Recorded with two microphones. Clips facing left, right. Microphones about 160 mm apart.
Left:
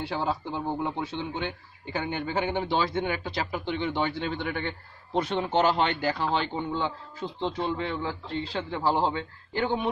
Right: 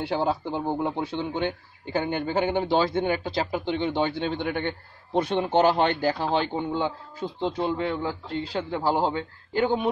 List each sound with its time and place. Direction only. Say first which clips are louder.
0.0 s speech: right 4 dB; 55° right (ahead or behind)
0.9 s a man's voice: right 4 dB; 45° right (ahead or behind); by 4.7 s 30° right (ahead or behind)
5.1 s a man's voice: right 3 dB; 45° right (ahead or behind)